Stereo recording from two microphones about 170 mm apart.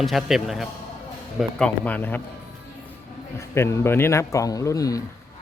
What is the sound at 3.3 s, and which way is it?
Speech, 15° left (ahead or behind).